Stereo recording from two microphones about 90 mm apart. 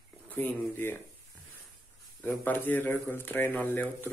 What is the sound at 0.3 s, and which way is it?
Speech, 25° left (ahead or behind).